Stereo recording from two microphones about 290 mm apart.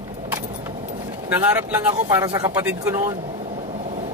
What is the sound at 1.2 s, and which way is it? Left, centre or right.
Speech, centre.